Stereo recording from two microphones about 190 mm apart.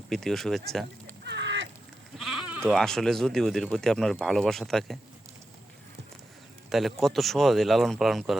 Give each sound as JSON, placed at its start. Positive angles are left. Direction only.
{"t": 0.1, "sound": "speech", "side_deg": 0}
{"t": 1.2, "sound": "a sound", "side_deg": -65}
{"t": 2.1, "sound": "goat", "side_deg": 0}
{"t": 2.6, "sound": "speech", "side_deg": 0}
{"t": 6.7, "sound": "speech", "side_deg": 0}